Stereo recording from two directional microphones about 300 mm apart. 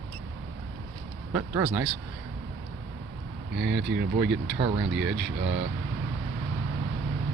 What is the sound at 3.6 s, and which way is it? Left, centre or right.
Speech, right.